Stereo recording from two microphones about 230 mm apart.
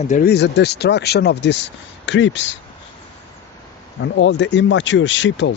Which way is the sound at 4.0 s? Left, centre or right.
Left.